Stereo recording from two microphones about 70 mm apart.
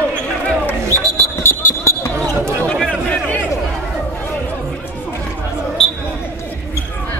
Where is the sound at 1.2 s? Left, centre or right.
Left.